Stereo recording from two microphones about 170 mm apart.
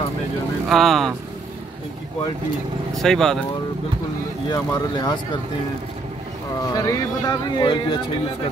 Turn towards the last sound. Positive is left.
turn(degrees=25)  # may be behind; listen again after turning